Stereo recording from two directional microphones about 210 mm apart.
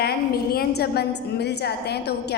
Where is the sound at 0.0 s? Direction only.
50° left (ahead or behind).